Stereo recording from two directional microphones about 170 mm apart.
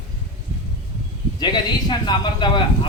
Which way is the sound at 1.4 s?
25° left (ahead or behind).